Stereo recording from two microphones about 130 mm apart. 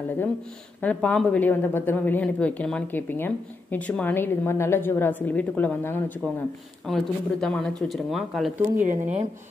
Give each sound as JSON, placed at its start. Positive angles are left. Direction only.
{"t": 0.7, "sound": "speech", "side_deg": 10}
{"t": 6.9, "sound": "speech", "side_deg": 5}
{"t": 8.7, "sound": "speech", "side_deg": -70}